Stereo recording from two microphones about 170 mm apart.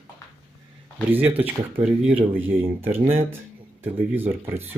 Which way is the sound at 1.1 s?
10° right (ahead or behind).